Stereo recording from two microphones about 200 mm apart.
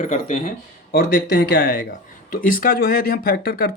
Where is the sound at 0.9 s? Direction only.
50° left (ahead or behind).